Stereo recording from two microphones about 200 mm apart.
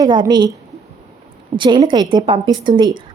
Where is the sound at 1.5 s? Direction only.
25° right (ahead or behind).